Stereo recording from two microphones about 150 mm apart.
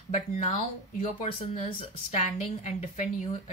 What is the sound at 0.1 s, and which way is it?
Speech, 50° left (ahead or behind).